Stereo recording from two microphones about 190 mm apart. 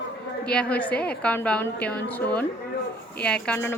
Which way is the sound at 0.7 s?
5° left (ahead or behind).